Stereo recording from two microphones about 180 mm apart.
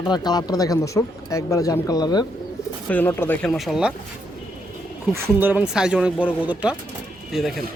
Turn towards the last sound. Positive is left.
turn(degrees=0)  # may be behind; listen again after turning